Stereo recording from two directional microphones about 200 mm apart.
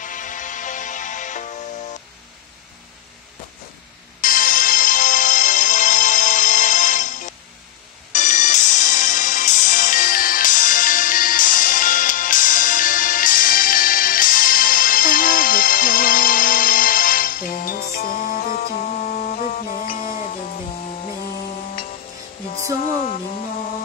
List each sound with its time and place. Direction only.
0.0 s music: 40° left (ahead or behind)
4.2 s music: 45° left (ahead or behind)